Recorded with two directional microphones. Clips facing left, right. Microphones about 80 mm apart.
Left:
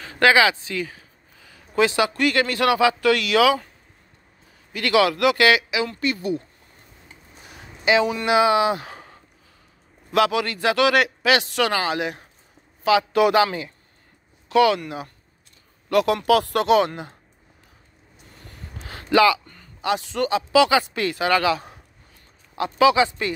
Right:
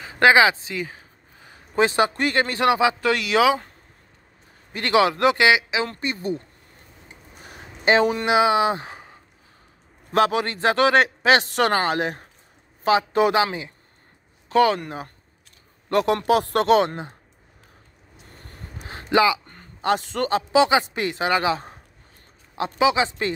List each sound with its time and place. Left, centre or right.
0.0 s a man's voice: right
4.7 s speech: right
7.4 s speech: right
10.1 s a man's voice: right
14.5 s a man's voice: right
18.9 s a sound: right
19.4 s speech: right
20.5 s speech: right